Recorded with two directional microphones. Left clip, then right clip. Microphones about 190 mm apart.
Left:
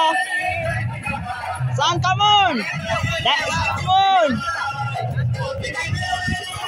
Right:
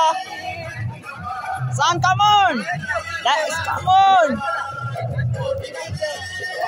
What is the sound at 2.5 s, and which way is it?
Speech, 45° left (ahead or behind).